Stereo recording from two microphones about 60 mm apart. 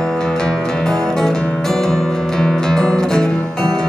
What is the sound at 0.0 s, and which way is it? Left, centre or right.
Music, centre.